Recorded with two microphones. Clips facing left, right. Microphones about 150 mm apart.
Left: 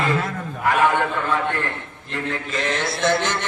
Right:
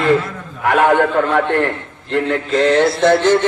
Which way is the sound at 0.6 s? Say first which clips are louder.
Right 6 dB; 65° right (ahead or behind).